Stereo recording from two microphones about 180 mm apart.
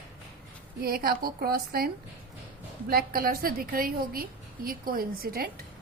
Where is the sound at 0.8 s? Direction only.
55° right (ahead or behind).